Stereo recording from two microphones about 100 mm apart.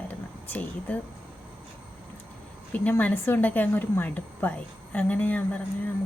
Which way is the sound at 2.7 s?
15° left (ahead or behind).